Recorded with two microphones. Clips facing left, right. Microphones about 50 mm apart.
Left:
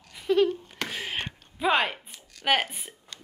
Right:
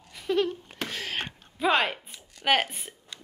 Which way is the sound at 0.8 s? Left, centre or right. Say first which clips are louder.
Even; centre.